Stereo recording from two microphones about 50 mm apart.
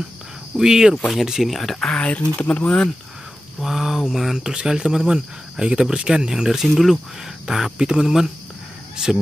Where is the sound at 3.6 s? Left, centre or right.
Centre.